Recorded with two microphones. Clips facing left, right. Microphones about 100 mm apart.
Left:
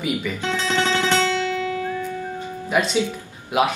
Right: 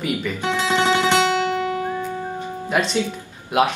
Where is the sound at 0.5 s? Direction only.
15° right (ahead or behind).